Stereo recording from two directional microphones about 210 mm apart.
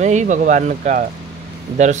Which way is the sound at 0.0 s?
35° right (ahead or behind).